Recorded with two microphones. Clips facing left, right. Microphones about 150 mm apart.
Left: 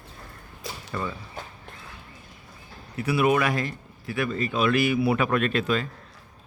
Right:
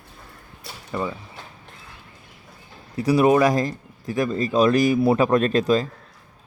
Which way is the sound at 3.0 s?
35° right (ahead or behind).